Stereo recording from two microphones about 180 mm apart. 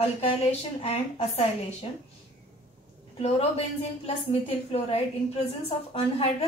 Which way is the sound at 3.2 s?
35° left (ahead or behind).